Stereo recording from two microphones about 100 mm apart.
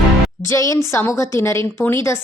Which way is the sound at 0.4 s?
30° left (ahead or behind).